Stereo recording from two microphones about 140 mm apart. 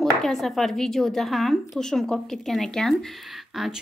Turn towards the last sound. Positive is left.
turn(degrees=0)  # may be behind; listen again after turning